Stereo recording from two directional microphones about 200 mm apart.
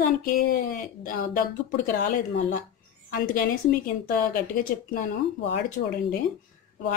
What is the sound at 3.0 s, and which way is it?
Speech, 45° left (ahead or behind).